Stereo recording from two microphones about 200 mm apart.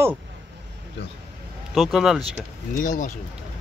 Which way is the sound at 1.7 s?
Centre (ahead or behind).